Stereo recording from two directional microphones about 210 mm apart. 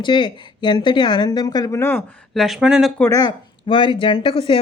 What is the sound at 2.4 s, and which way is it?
Speech, centre (ahead or behind).